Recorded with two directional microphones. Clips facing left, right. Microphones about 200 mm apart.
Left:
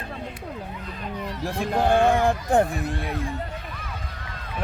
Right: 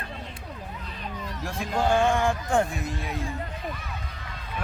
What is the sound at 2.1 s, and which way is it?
Speech, 35° left (ahead or behind).